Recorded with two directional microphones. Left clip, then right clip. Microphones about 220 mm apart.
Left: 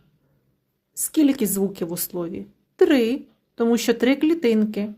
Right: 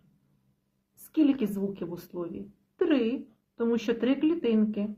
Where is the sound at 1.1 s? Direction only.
40° left (ahead or behind).